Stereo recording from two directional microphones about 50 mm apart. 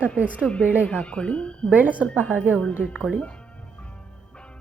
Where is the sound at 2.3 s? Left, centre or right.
Right.